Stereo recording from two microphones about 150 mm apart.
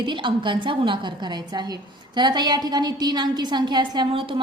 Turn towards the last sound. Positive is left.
turn(degrees=-35)  # may be behind; listen again after turning